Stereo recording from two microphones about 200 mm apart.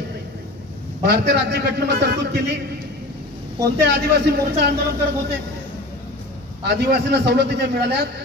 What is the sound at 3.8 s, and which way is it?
Speech, 55° right (ahead or behind).